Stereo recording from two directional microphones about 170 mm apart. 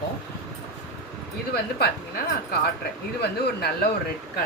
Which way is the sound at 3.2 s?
70° left (ahead or behind).